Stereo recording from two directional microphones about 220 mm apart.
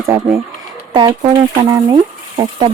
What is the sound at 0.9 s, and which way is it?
Speech, 15° right (ahead or behind).